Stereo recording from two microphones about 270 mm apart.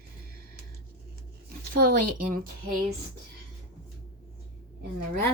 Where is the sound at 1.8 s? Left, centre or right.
Right.